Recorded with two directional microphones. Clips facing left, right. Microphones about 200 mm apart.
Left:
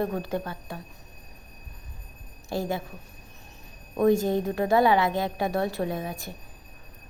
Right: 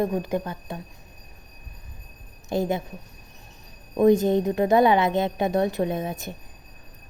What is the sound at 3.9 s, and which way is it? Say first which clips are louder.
A woman's voice: right 4 dB; 20° right (ahead or behind).